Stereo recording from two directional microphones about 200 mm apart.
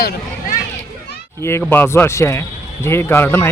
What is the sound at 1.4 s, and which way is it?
A man's voice, 10° left (ahead or behind).